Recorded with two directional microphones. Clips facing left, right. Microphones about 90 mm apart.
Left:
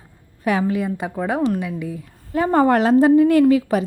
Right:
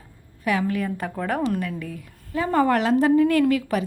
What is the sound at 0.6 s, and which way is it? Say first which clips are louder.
A woman's voice: left 4 dB; 20° left (ahead or behind).